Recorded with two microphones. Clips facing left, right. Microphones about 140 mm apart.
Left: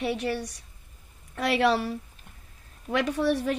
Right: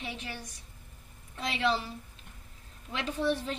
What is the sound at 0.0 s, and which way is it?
A woman's voice, 70° left (ahead or behind).